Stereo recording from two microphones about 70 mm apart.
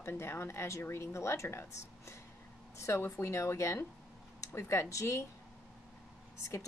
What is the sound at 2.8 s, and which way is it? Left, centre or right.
A woman's voice, left.